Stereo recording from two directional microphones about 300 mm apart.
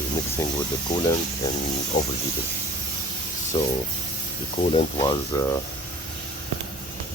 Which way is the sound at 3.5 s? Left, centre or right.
Centre.